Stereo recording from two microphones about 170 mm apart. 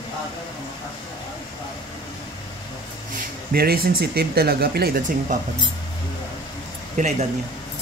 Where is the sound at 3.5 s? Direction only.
65° right (ahead or behind).